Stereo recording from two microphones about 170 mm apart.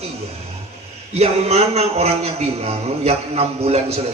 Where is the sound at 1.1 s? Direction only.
40° right (ahead or behind).